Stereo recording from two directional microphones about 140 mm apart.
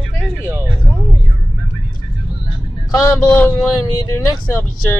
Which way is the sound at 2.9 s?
20° left (ahead or behind).